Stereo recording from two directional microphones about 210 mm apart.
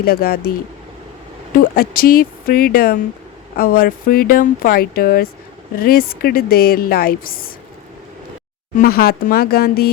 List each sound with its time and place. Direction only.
0.0 s a woman's voice: 45° left (ahead or behind)
1.5 s a woman's voice: 45° left (ahead or behind)
8.8 s a woman's voice: 45° left (ahead or behind)